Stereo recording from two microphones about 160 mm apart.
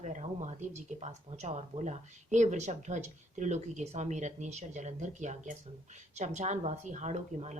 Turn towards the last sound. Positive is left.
turn(degrees=-45)  # may be behind; listen again after turning